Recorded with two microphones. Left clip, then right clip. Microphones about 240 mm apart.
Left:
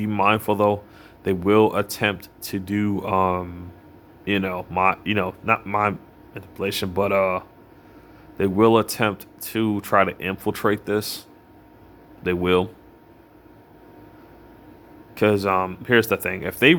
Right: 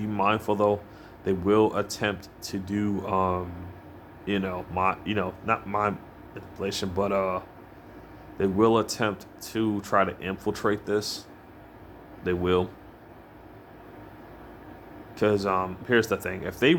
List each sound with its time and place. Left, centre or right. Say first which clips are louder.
0.0 s speech: left 5 dB; left
12.2 s speech: left 5 dB; left
15.1 s speech: left 5 dB; left